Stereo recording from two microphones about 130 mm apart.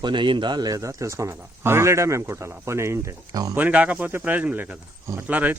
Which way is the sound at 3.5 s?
10° right (ahead or behind).